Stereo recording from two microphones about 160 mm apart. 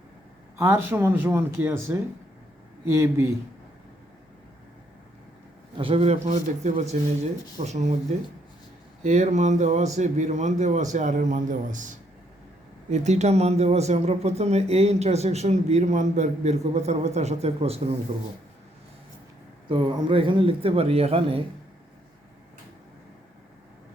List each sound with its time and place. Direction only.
0.6 s speech: 15° right (ahead or behind)
5.7 s speech: 35° right (ahead or behind)
9.0 s speech: 50° right (ahead or behind)
12.9 s speech: 45° right (ahead or behind)
19.6 s a man's voice: 30° right (ahead or behind)